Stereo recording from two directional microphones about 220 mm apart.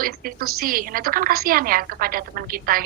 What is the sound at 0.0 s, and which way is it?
A woman's voice, 40° right (ahead or behind).